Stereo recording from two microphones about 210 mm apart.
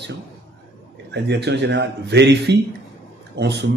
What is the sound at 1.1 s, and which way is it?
Speech, 55° right (ahead or behind).